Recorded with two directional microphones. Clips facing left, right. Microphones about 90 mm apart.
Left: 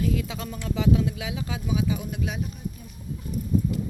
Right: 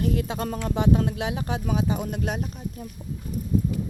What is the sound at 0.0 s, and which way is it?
Speech, 55° right (ahead or behind).